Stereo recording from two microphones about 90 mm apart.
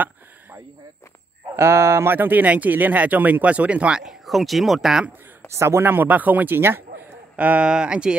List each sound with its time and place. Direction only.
1.6 s speech: 30° right (ahead or behind); by 5.0 s 5° right (ahead or behind)
5.5 s speech: 30° right (ahead or behind); by 8.2 s 10° right (ahead or behind)